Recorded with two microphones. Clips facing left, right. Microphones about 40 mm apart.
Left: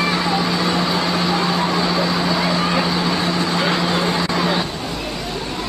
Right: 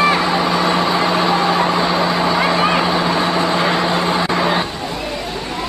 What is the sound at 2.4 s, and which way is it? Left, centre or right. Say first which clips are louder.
Vehicle: right 4 dB; right.